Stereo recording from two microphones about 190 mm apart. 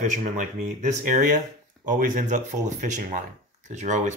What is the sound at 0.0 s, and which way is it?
Speech, 40° right (ahead or behind).